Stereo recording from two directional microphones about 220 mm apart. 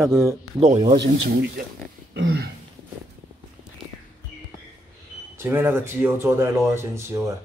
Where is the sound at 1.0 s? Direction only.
50° right (ahead or behind).